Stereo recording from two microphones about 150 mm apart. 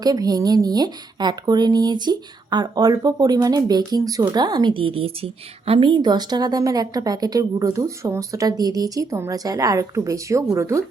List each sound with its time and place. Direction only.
0.0 s speech: 25° right (ahead or behind)